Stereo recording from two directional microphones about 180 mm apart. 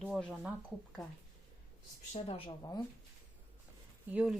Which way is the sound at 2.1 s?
35° left (ahead or behind).